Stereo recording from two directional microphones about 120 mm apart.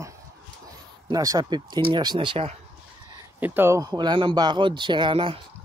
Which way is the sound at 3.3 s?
15° right (ahead or behind).